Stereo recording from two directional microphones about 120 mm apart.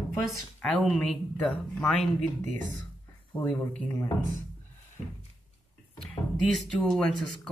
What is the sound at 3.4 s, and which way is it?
Speech, 10° left (ahead or behind).